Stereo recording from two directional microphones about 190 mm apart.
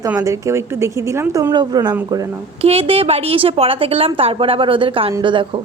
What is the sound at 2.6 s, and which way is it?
A woman's voice, 30° right (ahead or behind).